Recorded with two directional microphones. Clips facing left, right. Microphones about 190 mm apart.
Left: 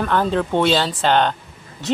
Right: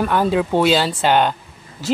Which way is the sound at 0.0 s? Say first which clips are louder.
Right 2 dB; 10° right (ahead or behind).